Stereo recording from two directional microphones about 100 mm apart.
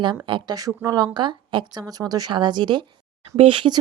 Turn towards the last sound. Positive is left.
turn(degrees=-55)  # may be behind; listen again after turning